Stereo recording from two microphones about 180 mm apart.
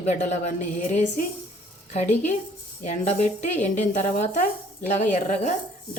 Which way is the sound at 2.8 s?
40° left (ahead or behind).